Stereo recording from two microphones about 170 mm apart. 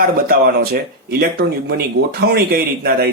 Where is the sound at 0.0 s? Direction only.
60° right (ahead or behind).